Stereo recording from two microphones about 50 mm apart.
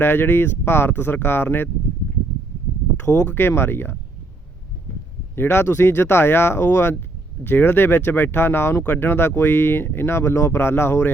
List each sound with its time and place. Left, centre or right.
0.0 s speech: left
3.2 s speech: left
5.4 s speech: left